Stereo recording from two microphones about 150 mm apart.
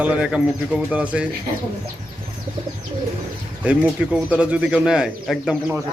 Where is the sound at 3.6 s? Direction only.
10° right (ahead or behind).